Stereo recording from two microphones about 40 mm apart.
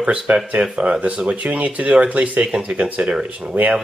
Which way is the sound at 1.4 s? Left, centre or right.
Right.